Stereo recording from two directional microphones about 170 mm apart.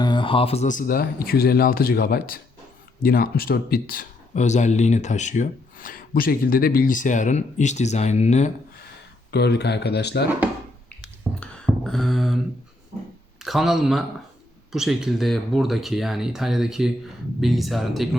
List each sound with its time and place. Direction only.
0.0 s speech: 30° left (ahead or behind); by 4.0 s 65° left (ahead or behind)
4.4 s speech: 45° left (ahead or behind)
9.3 s speech: 80° left
11.3 s a sound: 5° left (ahead or behind)
13.4 s speech: centre (ahead or behind)